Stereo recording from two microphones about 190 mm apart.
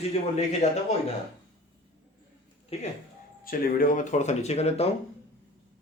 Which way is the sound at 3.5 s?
45° left (ahead or behind).